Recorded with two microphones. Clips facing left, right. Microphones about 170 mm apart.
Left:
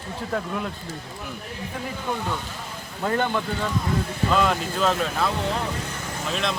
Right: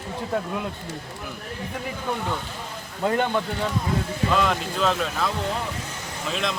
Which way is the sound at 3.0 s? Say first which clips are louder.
Right 1 dB; 15° right (ahead or behind).